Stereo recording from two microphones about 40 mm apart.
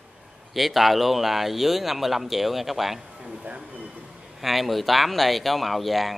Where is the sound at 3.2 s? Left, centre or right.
Right.